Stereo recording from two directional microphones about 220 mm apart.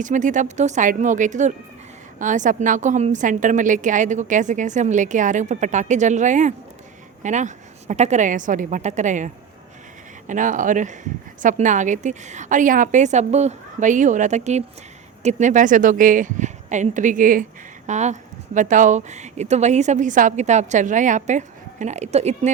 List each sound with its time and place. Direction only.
0.0 s a woman's voice: 35° right (ahead or behind)